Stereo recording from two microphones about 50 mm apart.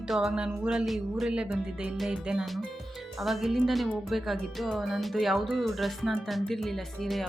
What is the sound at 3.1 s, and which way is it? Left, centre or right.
Speech, centre.